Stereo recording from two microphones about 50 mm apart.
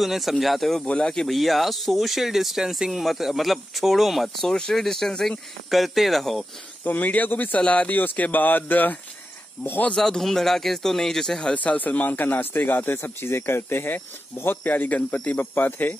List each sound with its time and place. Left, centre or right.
0.0 s a man's voice: centre
1.3 s speech: centre
4.5 s a man's voice: centre
6.8 s speech: left
8.0 s speech: left
9.9 s a man's voice: centre
11.5 s speech: left
13.9 s speech: left